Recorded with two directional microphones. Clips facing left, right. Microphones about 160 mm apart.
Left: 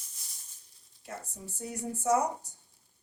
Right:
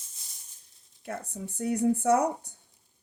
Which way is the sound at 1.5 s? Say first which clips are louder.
Right 12 dB; 60° right (ahead or behind).